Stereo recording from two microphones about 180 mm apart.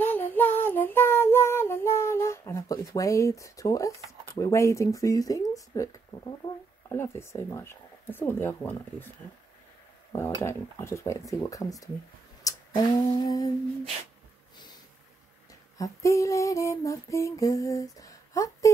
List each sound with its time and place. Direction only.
0.0 s child singing: 10° left (ahead or behind)
4.3 s speech: 15° left (ahead or behind)
10.1 s speech: 15° left (ahead or behind)
12.4 s a sound: 20° left (ahead or behind)
15.8 s speech: 15° left (ahead or behind)